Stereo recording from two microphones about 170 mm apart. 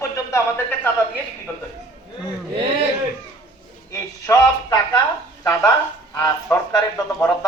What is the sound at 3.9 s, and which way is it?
Speech, 20° left (ahead or behind).